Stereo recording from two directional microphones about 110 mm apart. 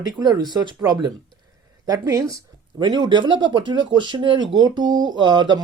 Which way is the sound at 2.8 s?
40° right (ahead or behind).